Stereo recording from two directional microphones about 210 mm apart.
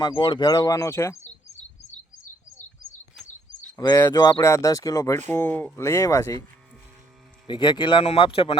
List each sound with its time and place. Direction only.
0.0 s speech: 25° left (ahead or behind)
3.8 s speech: 15° left (ahead or behind)
7.4 s speech: 20° left (ahead or behind)